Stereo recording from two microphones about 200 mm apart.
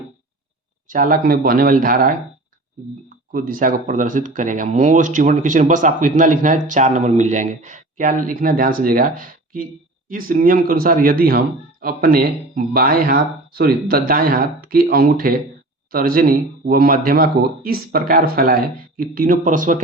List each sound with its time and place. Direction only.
0.9 s a man's voice: 45° right (ahead or behind)
3.3 s a man's voice: 45° right (ahead or behind)